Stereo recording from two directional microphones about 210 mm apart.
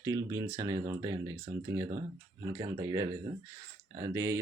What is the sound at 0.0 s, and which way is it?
Speech, 15° right (ahead or behind).